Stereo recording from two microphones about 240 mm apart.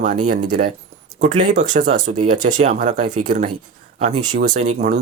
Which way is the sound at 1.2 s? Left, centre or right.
Right.